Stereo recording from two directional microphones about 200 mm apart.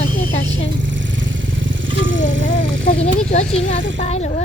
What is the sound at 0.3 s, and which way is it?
Vehicle, 90° right.